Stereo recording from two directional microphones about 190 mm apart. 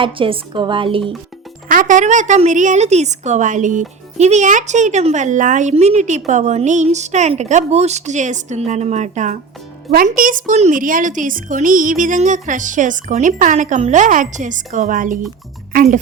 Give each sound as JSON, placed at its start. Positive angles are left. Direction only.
{"t": 0.0, "sound": "a woman's voice", "side_deg": -25}
{"t": 1.6, "sound": "a woman's voice", "side_deg": -45}